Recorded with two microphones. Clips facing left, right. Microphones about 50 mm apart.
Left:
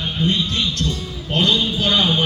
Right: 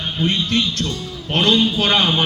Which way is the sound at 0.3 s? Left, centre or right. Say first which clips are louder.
Right 2 dB; right.